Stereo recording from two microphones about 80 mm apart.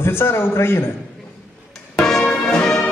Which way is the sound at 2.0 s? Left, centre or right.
Centre.